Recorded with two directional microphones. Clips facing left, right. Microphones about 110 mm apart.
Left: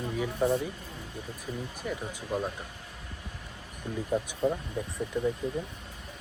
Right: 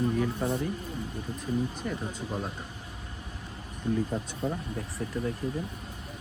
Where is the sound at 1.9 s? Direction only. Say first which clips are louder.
Left 1 dB; 10° left (ahead or behind).